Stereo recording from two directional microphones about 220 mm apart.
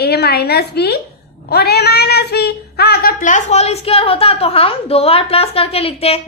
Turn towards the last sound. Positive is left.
turn(degrees=25)  # may be behind; listen again after turning